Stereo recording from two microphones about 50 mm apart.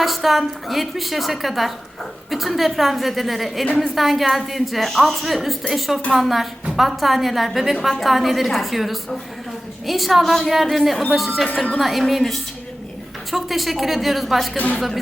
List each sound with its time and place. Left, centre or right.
0.0 s a woman's voice: centre
14.5 s a woman's voice: left